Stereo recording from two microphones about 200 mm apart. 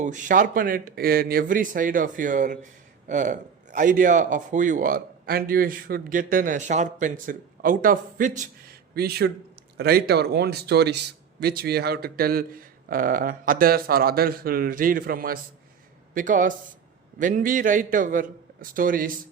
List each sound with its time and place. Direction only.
0.0 s a man's voice: 40° right (ahead or behind)
9.0 s a man's voice: 50° right (ahead or behind)